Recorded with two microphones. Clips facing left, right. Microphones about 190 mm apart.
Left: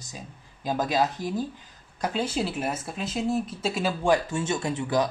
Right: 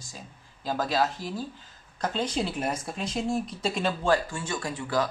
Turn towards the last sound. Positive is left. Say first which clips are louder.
# left 3 dB
turn(degrees=20)  # may be behind; listen again after turning